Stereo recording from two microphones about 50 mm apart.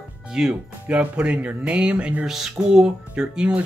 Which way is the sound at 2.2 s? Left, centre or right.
Centre.